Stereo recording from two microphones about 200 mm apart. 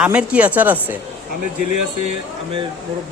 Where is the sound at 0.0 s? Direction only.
5° right (ahead or behind).